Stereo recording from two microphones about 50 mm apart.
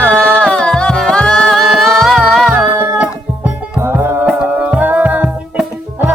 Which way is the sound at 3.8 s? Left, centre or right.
Right.